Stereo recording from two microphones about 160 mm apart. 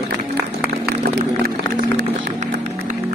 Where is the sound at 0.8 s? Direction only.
75° right (ahead or behind).